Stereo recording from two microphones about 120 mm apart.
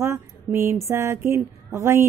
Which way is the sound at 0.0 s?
20° right (ahead or behind).